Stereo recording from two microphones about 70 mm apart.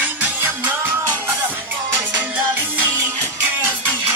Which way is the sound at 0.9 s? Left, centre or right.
Right.